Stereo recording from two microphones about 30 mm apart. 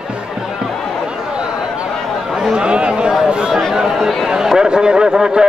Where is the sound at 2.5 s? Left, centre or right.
Right.